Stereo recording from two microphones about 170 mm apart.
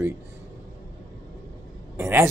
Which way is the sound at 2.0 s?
15° right (ahead or behind).